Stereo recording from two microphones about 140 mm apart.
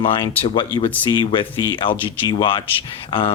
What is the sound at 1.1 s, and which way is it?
Speech, 35° left (ahead or behind).